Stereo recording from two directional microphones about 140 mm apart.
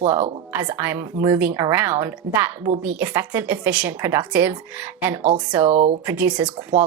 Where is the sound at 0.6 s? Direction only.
15° right (ahead or behind).